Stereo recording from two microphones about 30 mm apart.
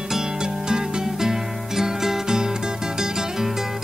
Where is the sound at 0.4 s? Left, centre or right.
Right.